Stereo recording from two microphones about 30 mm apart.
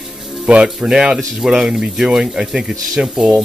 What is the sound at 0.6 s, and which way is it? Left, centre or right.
Speech, right.